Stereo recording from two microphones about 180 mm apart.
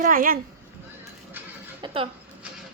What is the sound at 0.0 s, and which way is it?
Speech, 50° right (ahead or behind).